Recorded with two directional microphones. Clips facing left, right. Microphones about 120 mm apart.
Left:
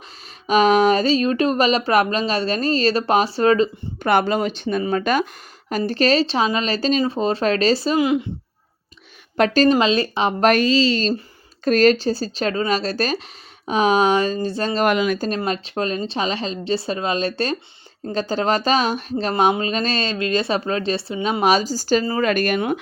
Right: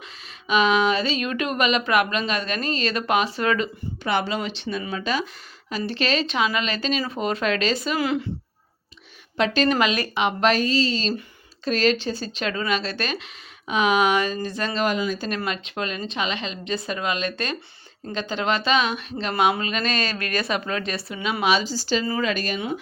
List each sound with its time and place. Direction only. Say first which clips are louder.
0.4 s speech: left 5 dB; 40° left (ahead or behind)
4.0 s speech: left 7 dB; 50° left (ahead or behind); by 7.9 s 35° left (ahead or behind)
7.9 s speech: left 5 dB; 20° left (ahead or behind)
9.4 s speech: left 5 dB; 40° left (ahead or behind)
9.8 s speech: left 4 dB; 30° left (ahead or behind)
10.5 s speech: left 5 dB; 85° left
11.6 s speech: left 6 dB; 45° left (ahead or behind)
14.8 s speech: left 7 dB; 70° left (ahead or behind)
15.4 s speech: left 5 dB; 35° left (ahead or behind)
19.3 s speech: left 3 dB; 30° left (ahead or behind)
21.4 s speech: left 4 dB; 40° left (ahead or behind); by 22.8 s 60° left (ahead or behind)